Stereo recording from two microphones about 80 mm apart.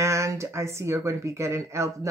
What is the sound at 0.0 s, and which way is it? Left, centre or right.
Speech, right.